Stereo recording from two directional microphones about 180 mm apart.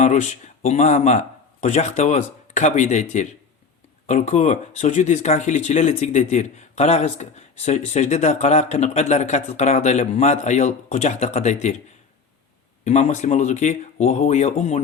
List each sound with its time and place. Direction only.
0.0 s speech: 40° left (ahead or behind)
12.8 s speech: 40° left (ahead or behind)